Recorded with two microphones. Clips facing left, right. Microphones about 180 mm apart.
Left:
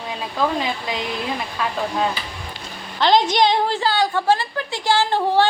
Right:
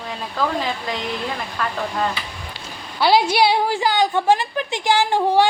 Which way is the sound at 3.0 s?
10° right (ahead or behind).